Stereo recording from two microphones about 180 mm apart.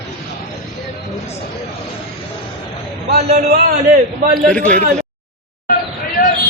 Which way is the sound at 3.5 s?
55° right (ahead or behind).